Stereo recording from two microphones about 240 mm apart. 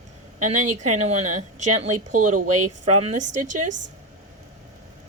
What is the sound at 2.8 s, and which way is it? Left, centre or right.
Speech, right.